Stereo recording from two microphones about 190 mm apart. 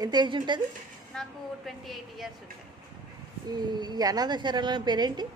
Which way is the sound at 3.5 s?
20° right (ahead or behind).